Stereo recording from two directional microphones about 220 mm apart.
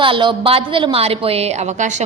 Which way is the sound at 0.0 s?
20° right (ahead or behind).